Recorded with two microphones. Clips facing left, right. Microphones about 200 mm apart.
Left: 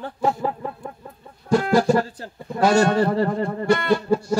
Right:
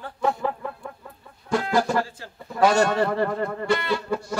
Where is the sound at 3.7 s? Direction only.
50° left (ahead or behind).